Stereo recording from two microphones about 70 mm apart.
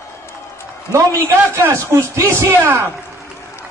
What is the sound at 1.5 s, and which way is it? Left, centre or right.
Speech, right.